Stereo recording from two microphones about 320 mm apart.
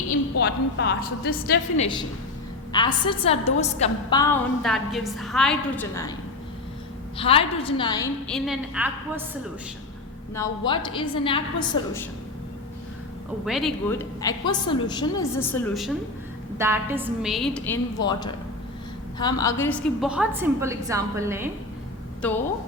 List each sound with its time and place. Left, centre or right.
0.1 s a woman's voice: left
1.7 s a woman's voice: centre
7.2 s a woman's voice: centre
8.4 s a woman's voice: centre
10.3 s a woman's voice: centre
13.4 s a woman's voice: centre